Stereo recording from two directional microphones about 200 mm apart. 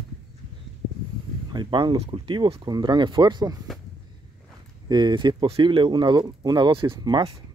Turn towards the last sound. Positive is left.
turn(degrees=-25)  # may be behind; listen again after turning